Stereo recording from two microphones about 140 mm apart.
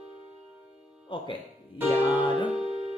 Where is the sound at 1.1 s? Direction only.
35° left (ahead or behind).